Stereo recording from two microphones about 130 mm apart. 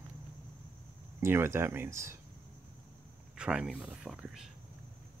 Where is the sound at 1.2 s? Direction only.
20° right (ahead or behind).